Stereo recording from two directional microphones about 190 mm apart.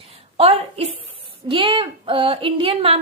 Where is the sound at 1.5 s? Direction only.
25° right (ahead or behind).